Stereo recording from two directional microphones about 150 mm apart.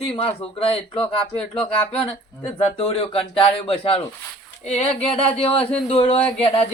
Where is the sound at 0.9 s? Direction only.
10° left (ahead or behind).